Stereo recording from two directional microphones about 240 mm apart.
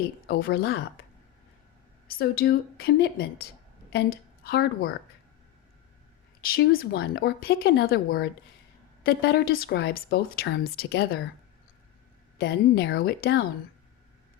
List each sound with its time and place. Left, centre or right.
0.3 s speech: left
2.1 s a woman's voice: left
6.4 s speech: left
12.4 s speech: left